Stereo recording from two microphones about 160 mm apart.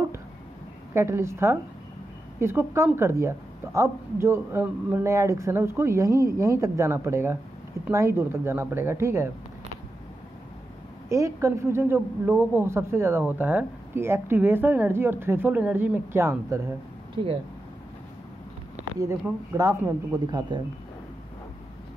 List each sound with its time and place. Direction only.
0.9 s speech: 15° right (ahead or behind)
11.1 s speech: 20° right (ahead or behind)
17.1 s speech: 35° right (ahead or behind)
18.9 s speech: 20° right (ahead or behind)